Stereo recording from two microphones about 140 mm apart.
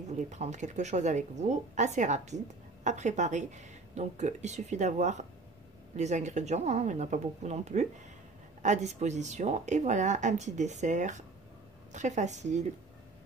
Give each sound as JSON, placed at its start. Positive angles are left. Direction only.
{"t": 0.1, "sound": "speech", "side_deg": -55}